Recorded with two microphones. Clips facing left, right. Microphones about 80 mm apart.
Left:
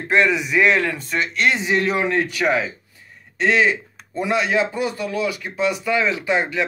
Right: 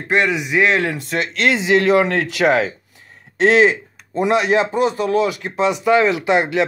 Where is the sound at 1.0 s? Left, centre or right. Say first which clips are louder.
Right 2 dB; right.